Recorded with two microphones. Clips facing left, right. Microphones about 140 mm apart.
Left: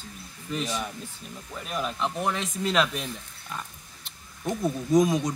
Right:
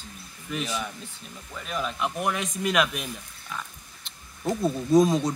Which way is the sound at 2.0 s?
10° right (ahead or behind).